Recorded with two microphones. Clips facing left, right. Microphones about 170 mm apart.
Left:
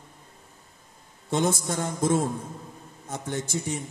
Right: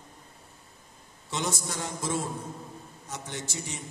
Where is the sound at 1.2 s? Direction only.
50° left (ahead or behind).